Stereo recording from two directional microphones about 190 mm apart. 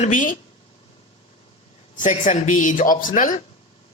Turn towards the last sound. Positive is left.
turn(degrees=45)  # may be behind; listen again after turning